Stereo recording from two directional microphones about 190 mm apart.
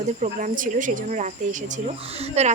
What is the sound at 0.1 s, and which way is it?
Speech, 40° right (ahead or behind).